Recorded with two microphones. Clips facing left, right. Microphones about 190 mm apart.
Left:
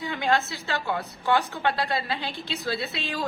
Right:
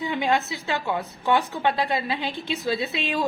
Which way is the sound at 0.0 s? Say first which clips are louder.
Right 2 dB; 20° right (ahead or behind).